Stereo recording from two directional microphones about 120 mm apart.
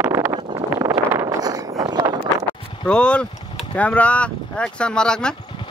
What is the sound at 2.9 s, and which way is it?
Speech, 10° left (ahead or behind).